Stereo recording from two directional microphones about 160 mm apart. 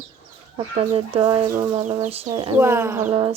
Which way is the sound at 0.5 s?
35° right (ahead or behind).